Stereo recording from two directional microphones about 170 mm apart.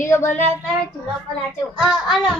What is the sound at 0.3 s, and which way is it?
Child singing, 45° left (ahead or behind).